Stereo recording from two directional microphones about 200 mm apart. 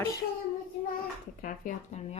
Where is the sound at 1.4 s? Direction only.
40° left (ahead or behind).